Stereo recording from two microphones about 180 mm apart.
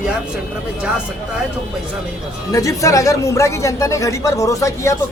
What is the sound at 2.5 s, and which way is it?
Speech, 15° left (ahead or behind).